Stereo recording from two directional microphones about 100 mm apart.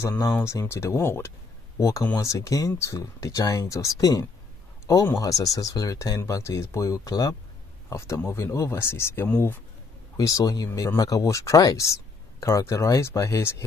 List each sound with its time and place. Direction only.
0.4 s speech: 30° left (ahead or behind)
10.1 s speech: 35° left (ahead or behind)